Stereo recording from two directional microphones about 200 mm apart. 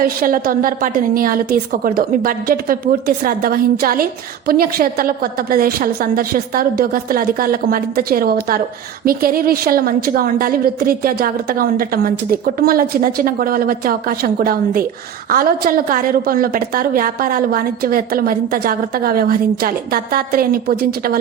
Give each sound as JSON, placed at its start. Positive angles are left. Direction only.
{"t": 0.0, "sound": "a woman's voice", "side_deg": -45}